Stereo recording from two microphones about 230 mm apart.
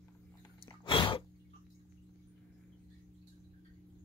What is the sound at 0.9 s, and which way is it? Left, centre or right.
Gasp, left.